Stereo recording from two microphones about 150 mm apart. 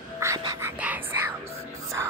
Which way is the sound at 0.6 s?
10° right (ahead or behind).